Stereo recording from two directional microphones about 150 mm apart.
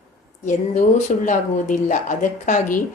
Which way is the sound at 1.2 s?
55° left (ahead or behind).